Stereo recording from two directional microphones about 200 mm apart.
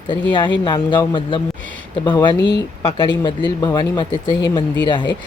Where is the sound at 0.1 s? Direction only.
25° left (ahead or behind).